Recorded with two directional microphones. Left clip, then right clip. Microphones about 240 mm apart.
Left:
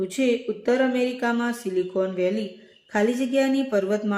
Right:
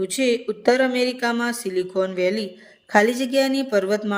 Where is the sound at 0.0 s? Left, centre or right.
Right.